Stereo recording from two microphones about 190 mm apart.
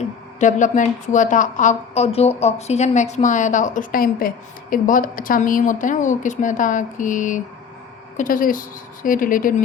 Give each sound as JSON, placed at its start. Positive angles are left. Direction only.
{"t": 0.3, "sound": "a woman's voice", "side_deg": 40}